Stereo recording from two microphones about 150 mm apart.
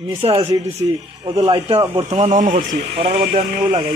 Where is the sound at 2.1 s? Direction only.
50° right (ahead or behind).